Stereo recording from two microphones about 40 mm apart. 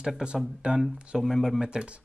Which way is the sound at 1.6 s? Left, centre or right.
Right.